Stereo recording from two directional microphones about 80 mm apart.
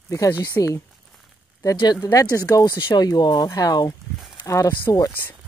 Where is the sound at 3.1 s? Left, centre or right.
Left.